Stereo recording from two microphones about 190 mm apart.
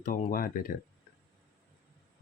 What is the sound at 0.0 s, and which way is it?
Speech, 45° left (ahead or behind).